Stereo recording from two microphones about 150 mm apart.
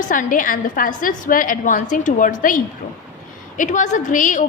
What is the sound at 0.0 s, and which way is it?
A woman's voice, 60° left (ahead or behind).